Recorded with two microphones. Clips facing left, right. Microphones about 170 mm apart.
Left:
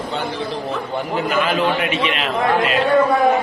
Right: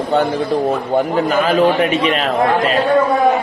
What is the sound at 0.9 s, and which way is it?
A man's voice, 40° right (ahead or behind).